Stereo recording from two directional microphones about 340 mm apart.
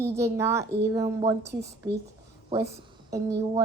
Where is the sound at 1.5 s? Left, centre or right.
Right.